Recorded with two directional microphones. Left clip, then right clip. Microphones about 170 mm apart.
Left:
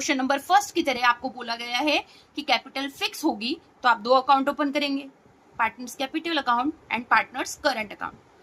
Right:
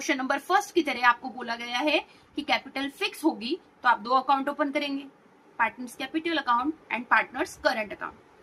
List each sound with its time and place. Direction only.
0.0 s a woman's voice: 45° left (ahead or behind)